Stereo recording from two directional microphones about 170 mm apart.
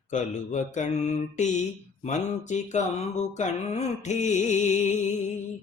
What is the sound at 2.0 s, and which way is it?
Mantra, 45° left (ahead or behind).